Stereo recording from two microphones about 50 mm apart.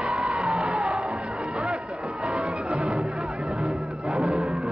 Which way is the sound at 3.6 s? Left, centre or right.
Centre.